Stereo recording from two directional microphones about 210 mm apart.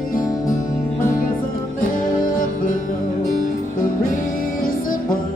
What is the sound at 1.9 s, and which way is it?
Music, 40° left (ahead or behind).